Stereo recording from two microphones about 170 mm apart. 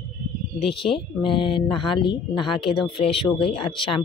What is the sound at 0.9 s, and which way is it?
Speech, 30° left (ahead or behind).